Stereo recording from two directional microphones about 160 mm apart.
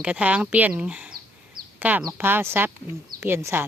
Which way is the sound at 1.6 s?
65° right (ahead or behind).